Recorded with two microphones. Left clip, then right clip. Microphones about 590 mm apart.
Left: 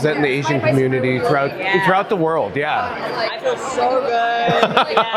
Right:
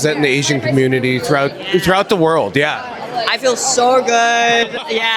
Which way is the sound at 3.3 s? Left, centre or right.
Right.